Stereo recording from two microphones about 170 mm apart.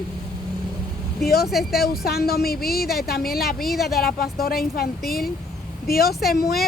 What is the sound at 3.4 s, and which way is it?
Speech, centre (ahead or behind).